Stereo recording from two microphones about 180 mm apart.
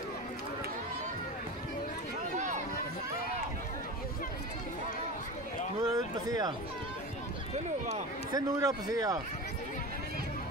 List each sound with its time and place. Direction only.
2.3 s run: 40° right (ahead or behind)
5.8 s a sound: 20° right (ahead or behind)
8.3 s speech: 20° right (ahead or behind)